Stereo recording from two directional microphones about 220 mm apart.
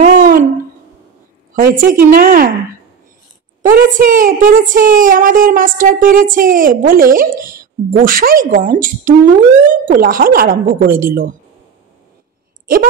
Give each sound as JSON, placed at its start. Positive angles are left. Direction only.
{"t": 0.0, "sound": "a sound", "side_deg": -40}
{"t": 1.5, "sound": "a woman's voice", "side_deg": -40}
{"t": 3.6, "sound": "a woman's voice", "side_deg": -40}